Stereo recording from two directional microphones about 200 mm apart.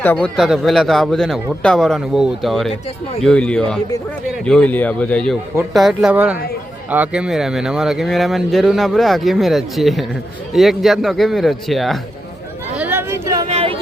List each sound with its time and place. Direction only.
0.0 s speech: 5° left (ahead or behind)
12.7 s chatter: 10° right (ahead or behind)
13.5 s a sound: 30° right (ahead or behind)